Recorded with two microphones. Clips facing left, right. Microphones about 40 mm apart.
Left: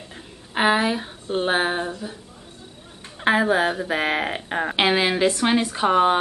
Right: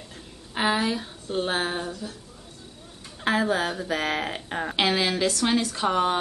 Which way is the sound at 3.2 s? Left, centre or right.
Left.